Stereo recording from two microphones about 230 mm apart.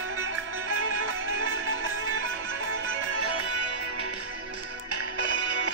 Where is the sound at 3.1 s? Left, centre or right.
Right.